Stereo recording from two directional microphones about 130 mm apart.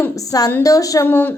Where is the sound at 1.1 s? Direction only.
15° left (ahead or behind).